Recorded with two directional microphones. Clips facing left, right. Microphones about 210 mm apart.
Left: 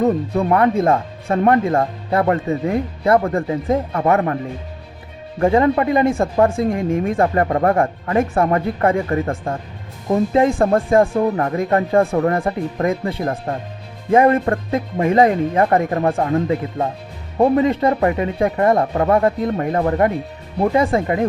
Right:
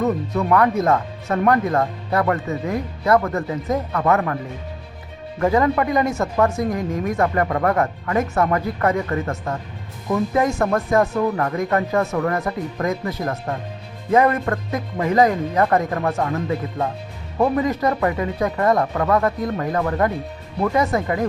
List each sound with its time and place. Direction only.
0.0 s speech: 30° left (ahead or behind)
5.4 s speech: 25° left (ahead or behind)